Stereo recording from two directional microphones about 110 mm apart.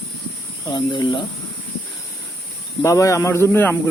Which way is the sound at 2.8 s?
30° left (ahead or behind).